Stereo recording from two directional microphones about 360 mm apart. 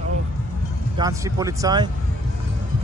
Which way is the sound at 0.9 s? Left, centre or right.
Centre.